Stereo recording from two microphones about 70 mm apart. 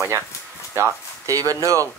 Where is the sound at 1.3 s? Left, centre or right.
Right.